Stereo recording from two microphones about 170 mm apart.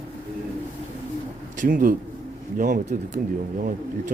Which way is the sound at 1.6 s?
55° right (ahead or behind).